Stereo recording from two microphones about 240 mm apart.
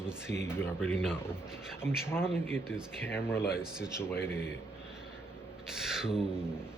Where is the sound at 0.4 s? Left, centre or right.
Centre.